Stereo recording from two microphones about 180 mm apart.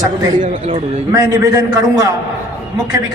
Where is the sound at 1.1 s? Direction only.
20° right (ahead or behind).